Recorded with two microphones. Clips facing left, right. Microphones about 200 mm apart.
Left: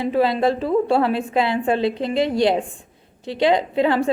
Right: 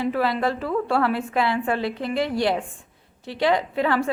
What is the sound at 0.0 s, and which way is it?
Speech, 20° left (ahead or behind).